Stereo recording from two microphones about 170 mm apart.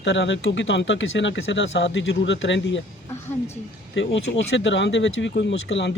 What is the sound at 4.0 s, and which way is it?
Speech, 90° left.